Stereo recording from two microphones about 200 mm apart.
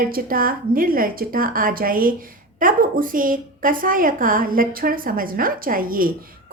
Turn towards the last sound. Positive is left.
turn(degrees=-45)  # may be behind; listen again after turning